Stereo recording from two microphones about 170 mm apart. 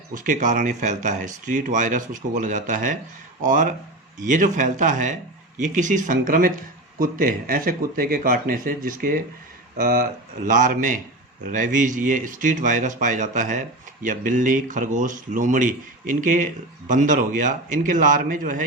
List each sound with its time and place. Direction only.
0.1 s speech: 50° right (ahead or behind)